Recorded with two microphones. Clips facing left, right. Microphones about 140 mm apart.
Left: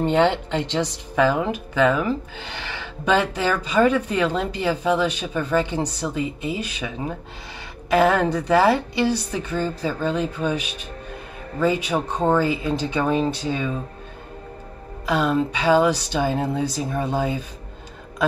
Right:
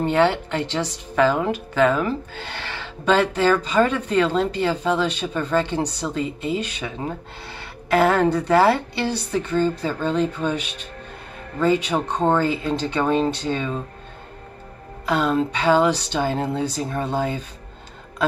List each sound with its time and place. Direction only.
0.2 s speech: 20° left (ahead or behind)
7.9 s speech: 10° left (ahead or behind)
15.0 s speech: 10° left (ahead or behind)